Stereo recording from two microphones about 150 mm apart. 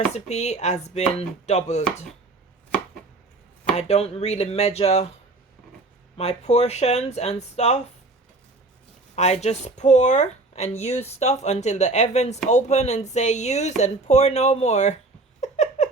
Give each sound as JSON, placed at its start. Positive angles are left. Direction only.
{"t": 0.0, "sound": "speech", "side_deg": 50}
{"t": 3.8, "sound": "speech", "side_deg": 45}
{"t": 6.1, "sound": "speech", "side_deg": 45}
{"t": 9.1, "sound": "speech", "side_deg": 45}
{"t": 15.4, "sound": "a sound", "side_deg": 50}